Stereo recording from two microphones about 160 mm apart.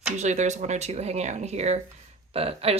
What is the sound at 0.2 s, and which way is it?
Speech, 45° right (ahead or behind).